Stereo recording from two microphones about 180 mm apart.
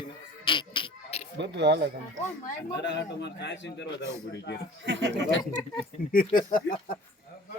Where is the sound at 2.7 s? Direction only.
75° left (ahead or behind).